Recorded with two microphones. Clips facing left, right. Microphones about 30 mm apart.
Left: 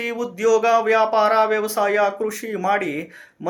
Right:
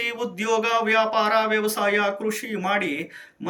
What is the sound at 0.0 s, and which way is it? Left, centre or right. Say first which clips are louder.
Speech: left 5 dB; right.